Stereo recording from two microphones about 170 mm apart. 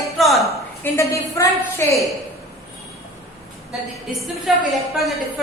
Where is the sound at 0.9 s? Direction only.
15° left (ahead or behind).